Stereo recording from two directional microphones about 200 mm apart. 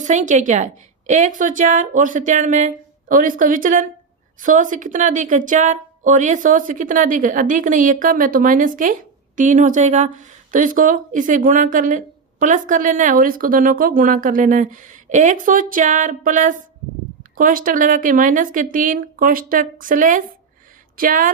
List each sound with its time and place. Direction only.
0.0 s a woman's voice: 40° right (ahead or behind)